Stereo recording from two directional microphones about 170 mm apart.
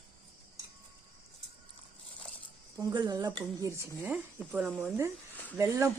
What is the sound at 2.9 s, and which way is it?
Speech, 25° right (ahead or behind).